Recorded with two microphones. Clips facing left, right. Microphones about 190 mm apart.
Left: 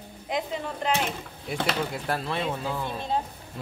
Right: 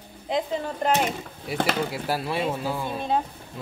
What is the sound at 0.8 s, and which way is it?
Speech, 45° right (ahead or behind).